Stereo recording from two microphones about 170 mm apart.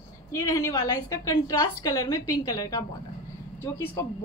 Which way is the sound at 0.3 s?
20° left (ahead or behind).